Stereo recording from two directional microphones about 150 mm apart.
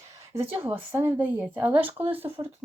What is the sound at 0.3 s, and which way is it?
Speech, 40° right (ahead or behind).